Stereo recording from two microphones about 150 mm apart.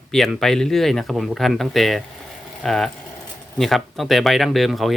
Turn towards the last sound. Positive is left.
turn(degrees=0)  # may be behind; listen again after turning